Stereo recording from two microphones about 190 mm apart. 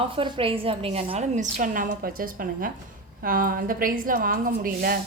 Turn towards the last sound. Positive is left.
turn(degrees=-50)  # may be behind; listen again after turning